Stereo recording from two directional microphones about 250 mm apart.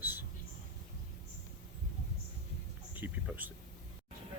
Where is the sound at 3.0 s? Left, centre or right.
Centre.